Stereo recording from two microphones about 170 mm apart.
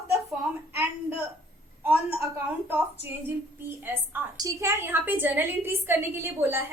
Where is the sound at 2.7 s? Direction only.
10° right (ahead or behind).